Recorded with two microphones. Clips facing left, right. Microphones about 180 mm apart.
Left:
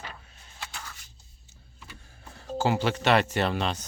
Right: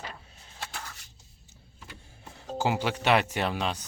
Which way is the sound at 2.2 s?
20° right (ahead or behind).